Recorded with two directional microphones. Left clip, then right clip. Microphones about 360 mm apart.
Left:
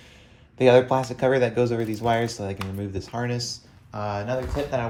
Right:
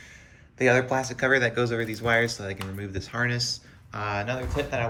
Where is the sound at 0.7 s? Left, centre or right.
Left.